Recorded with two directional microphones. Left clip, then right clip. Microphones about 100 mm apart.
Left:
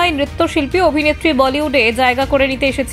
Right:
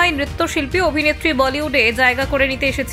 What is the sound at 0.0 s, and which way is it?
A woman's voice, 45° left (ahead or behind).